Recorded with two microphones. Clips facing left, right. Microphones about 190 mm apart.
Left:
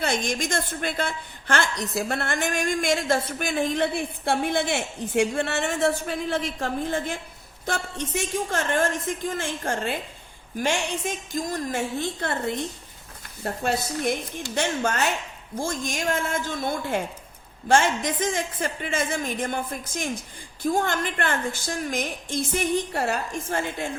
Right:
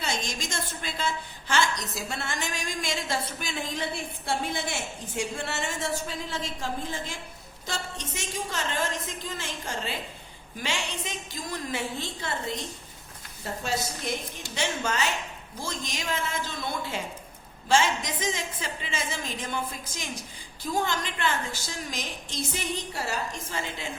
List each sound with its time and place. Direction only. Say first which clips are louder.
0.0 s a woman's voice: left 7 dB; 55° left (ahead or behind)